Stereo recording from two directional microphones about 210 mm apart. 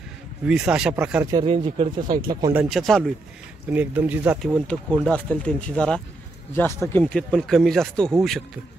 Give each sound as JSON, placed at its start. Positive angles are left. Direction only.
{"t": 0.5, "sound": "speech", "side_deg": -5}
{"t": 1.3, "sound": "speech", "side_deg": -25}
{"t": 2.5, "sound": "speech", "side_deg": 0}